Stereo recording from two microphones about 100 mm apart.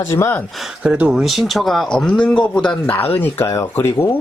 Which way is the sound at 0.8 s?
10° right (ahead or behind).